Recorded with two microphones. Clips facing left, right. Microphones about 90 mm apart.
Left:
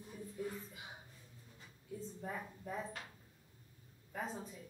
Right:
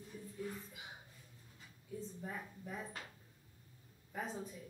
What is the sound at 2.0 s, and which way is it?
Speech, 5° left (ahead or behind).